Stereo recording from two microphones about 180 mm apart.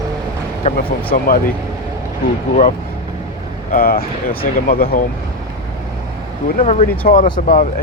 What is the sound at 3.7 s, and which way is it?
Speech, 55° left (ahead or behind).